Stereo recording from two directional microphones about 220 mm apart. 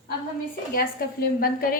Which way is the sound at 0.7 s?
40° left (ahead or behind).